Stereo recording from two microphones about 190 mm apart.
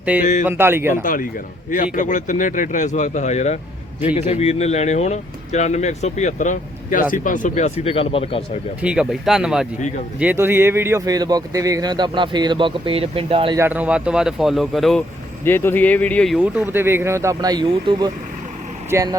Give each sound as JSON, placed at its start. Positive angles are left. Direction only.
{"t": 0.1, "sound": "speech", "side_deg": -10}
{"t": 1.0, "sound": "a man's voice", "side_deg": 45}
{"t": 8.8, "sound": "speech", "side_deg": -5}
{"t": 13.6, "sound": "speech", "side_deg": -10}
{"t": 16.4, "sound": "speech", "side_deg": -10}